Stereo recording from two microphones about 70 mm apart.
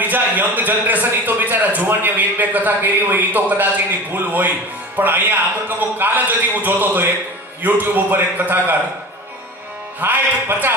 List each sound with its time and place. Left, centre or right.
0.0 s a man's voice: right
9.9 s a man's voice: right